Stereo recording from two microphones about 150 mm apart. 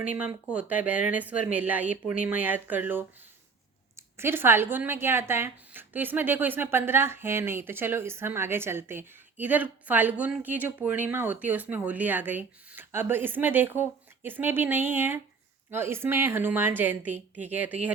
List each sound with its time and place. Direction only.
0.2 s a woman's voice: 10° right (ahead or behind)